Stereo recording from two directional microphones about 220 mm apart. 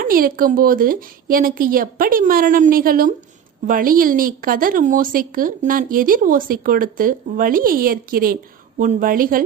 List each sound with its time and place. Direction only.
0.0 s a woman's voice: 40° right (ahead or behind)